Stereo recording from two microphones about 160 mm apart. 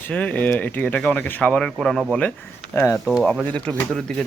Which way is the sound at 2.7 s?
15° left (ahead or behind).